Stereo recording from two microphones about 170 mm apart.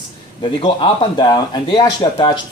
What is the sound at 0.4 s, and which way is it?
A man's voice, 30° left (ahead or behind).